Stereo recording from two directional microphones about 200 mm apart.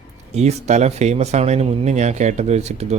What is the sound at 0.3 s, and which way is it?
Speech, 35° right (ahead or behind).